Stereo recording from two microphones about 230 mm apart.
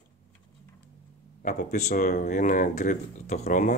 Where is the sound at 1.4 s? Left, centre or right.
Left.